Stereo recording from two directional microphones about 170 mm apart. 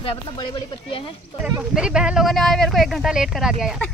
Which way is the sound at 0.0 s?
30° left (ahead or behind).